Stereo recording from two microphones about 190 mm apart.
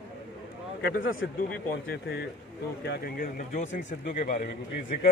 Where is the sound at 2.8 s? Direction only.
55° left (ahead or behind).